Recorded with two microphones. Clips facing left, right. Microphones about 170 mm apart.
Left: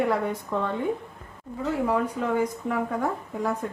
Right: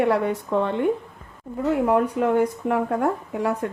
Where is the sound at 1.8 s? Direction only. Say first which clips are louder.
Right 5 dB; 60° right (ahead or behind).